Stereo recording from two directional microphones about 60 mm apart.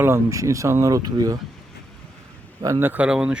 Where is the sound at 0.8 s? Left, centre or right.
Right.